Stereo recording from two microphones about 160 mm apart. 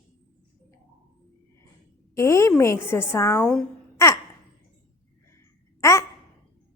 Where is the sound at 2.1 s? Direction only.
15° left (ahead or behind).